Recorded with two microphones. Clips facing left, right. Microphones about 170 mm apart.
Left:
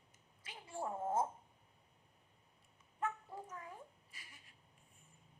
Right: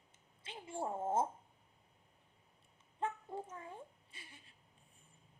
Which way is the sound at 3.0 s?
25° right (ahead or behind).